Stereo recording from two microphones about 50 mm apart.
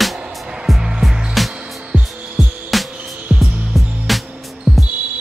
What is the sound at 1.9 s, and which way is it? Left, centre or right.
Music, right.